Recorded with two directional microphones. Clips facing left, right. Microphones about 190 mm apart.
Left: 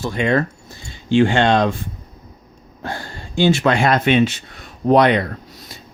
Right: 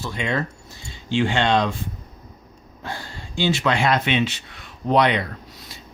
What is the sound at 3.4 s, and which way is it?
Speech, 50° left (ahead or behind).